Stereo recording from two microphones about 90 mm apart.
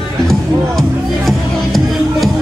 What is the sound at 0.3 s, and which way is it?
Music, 5° left (ahead or behind).